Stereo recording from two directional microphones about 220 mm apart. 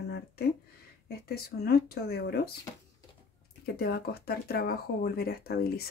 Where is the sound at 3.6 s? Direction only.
45° left (ahead or behind).